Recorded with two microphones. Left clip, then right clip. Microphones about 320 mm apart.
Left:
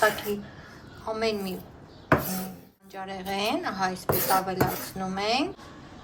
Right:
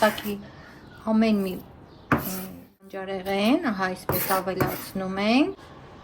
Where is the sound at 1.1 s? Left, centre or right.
Right.